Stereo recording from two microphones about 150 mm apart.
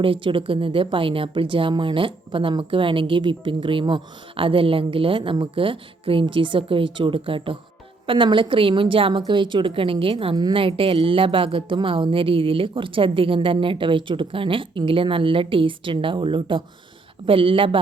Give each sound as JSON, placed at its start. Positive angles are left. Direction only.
{"t": 0.0, "sound": "a woman's voice", "side_deg": -35}